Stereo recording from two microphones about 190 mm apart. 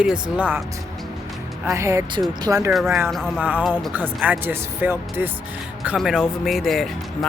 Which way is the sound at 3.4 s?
10° right (ahead or behind).